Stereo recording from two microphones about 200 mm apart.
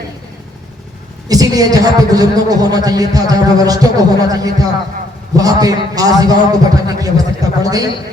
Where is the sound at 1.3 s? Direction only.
20° right (ahead or behind).